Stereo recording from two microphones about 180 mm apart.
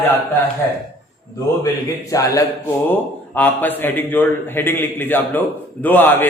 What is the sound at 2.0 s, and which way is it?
A man's voice, 20° left (ahead or behind).